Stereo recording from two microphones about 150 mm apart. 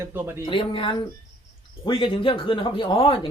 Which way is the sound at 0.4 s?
35° left (ahead or behind).